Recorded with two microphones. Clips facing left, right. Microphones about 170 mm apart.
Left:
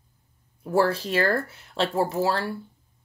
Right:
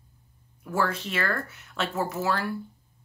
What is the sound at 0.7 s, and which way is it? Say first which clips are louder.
Speech: left 6 dB; 35° left (ahead or behind).